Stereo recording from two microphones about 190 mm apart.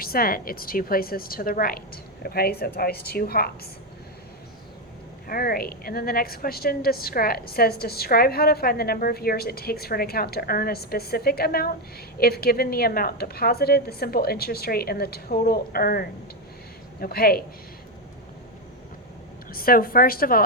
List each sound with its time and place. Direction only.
0.0 s a woman's voice: 50° left (ahead or behind)
5.3 s a woman's voice: 50° left (ahead or behind)
19.5 s a woman's voice: 50° left (ahead or behind)